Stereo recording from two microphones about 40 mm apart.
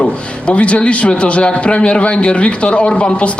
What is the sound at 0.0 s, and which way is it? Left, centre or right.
Speech, left.